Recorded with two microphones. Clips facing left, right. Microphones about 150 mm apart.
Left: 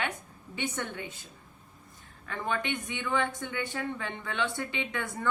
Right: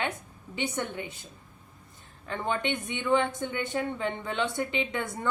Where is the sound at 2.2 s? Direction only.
25° right (ahead or behind).